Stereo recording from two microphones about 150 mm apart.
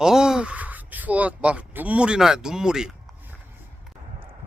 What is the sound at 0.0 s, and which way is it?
Speech, 5° right (ahead or behind).